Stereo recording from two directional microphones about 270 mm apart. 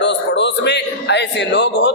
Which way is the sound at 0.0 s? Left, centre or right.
Left.